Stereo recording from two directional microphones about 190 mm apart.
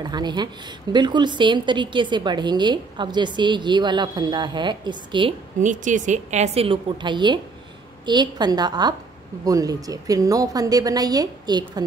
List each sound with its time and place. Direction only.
0.0 s a woman's voice: 20° right (ahead or behind)
5.6 s a woman's voice: 40° right (ahead or behind); by 11.8 s 20° right (ahead or behind)